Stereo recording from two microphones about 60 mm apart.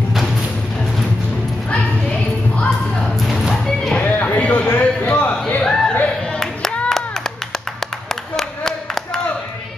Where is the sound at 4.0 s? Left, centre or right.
Left.